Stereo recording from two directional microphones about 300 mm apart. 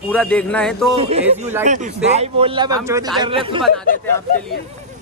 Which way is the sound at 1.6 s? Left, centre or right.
Right.